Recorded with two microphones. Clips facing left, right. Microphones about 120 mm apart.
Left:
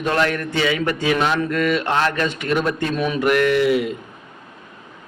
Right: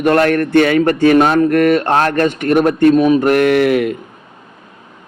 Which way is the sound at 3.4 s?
60° right (ahead or behind).